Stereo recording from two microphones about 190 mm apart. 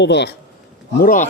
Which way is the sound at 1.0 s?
45° left (ahead or behind).